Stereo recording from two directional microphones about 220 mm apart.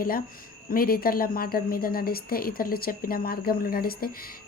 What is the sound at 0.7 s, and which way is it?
A woman's voice, 40° left (ahead or behind).